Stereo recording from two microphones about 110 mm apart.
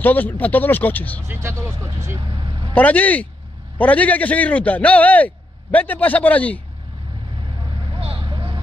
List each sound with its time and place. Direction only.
0.0 s a man's voice: 15° left (ahead or behind)
1.2 s speech: 25° right (ahead or behind)
2.1 s speech: 45° right (ahead or behind)
2.7 s a man's voice: 15° left (ahead or behind)
8.0 s vehicle: 45° right (ahead or behind)